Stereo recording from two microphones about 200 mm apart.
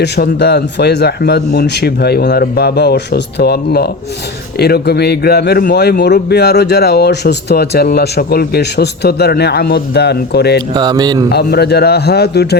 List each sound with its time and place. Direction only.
0.0 s a man's voice: 55° left (ahead or behind)
10.8 s speech: 20° right (ahead or behind)
11.3 s a man's voice: 55° left (ahead or behind)